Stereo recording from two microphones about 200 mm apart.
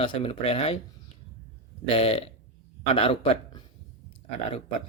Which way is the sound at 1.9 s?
30° left (ahead or behind).